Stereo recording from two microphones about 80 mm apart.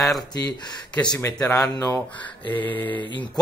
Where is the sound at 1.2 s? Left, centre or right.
Left.